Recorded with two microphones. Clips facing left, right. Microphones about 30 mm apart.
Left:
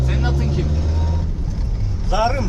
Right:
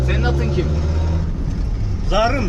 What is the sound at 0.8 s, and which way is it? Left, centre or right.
Vehicle, centre.